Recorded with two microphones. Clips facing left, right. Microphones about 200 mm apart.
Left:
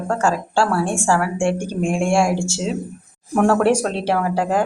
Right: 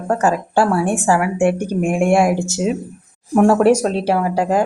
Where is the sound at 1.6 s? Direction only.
60° right (ahead or behind).